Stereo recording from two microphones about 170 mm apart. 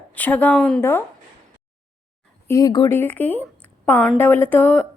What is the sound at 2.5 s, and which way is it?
Speech, 20° left (ahead or behind).